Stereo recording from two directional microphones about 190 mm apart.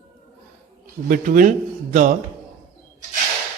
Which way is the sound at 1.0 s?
45° right (ahead or behind).